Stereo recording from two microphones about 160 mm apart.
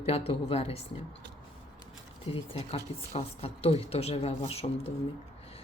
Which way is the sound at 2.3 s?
35° left (ahead or behind).